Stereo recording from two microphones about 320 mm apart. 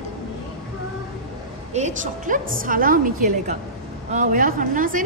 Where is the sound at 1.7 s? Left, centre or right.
Right.